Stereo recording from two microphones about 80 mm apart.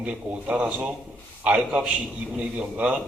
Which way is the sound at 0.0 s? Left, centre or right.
Centre.